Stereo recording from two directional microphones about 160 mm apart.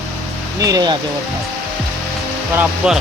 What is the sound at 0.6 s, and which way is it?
Speech, 25° right (ahead or behind).